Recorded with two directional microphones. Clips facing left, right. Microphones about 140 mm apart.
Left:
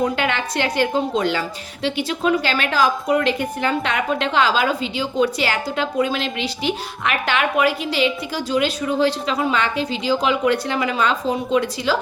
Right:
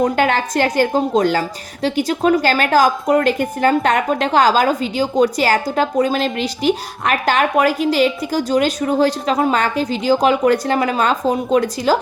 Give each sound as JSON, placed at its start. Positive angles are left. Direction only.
{"t": 0.0, "sound": "a woman's voice", "side_deg": -40}